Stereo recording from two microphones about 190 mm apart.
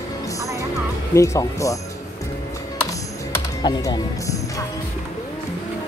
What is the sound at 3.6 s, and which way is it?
Speech, 20° left (ahead or behind).